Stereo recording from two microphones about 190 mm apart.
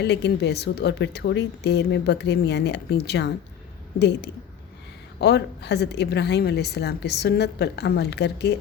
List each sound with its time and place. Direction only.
0.0 s a woman's voice: 60° left (ahead or behind)
5.2 s a woman's voice: 60° left (ahead or behind)